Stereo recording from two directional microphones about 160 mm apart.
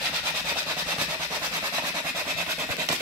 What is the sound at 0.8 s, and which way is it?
Vehicle, 20° right (ahead or behind).